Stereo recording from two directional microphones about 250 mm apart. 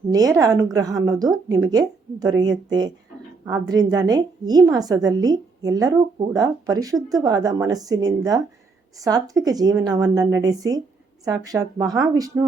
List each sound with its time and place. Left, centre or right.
0.1 s a woman's voice: centre